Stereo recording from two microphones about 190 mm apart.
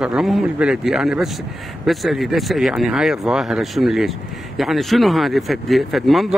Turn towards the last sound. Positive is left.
turn(degrees=0)  # may be behind; listen again after turning